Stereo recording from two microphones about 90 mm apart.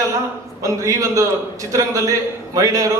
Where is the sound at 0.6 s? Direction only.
40° right (ahead or behind).